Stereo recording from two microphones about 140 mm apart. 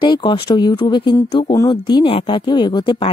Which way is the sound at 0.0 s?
35° left (ahead or behind).